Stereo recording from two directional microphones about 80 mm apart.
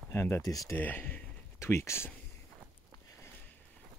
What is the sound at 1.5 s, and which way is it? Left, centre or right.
Speech, left.